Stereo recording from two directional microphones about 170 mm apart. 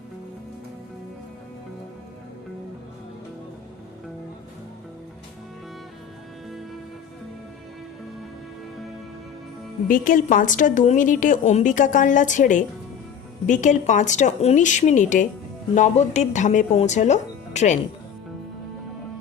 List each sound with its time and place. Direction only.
9.9 s a woman's voice: 50° left (ahead or behind)